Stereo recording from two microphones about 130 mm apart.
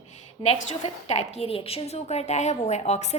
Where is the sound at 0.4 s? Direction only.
55° left (ahead or behind).